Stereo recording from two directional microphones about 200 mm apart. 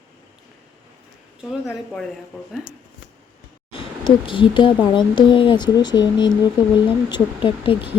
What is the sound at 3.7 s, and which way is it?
Speech, 25° left (ahead or behind).